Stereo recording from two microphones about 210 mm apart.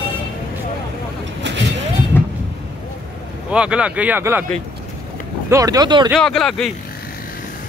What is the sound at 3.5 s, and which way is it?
Speech, 5° right (ahead or behind).